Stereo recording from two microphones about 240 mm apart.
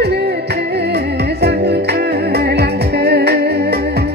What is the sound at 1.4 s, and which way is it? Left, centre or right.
Music, right.